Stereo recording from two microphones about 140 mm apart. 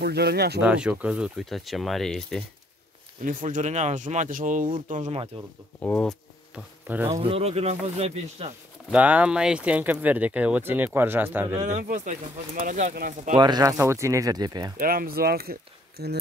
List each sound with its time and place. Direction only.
0.6 s speech: 10° right (ahead or behind)
3.3 s speech: 70° right (ahead or behind)
5.3 s speech: 45° right (ahead or behind)
5.8 s speech: 15° left (ahead or behind)
7.2 s speech: 40° right (ahead or behind)
8.9 s speech: 10° right (ahead or behind)
11.6 s speech: 60° right (ahead or behind); by 13.3 s 75° right (ahead or behind)
13.4 s speech: 30° right (ahead or behind)
14.8 s speech: 90° right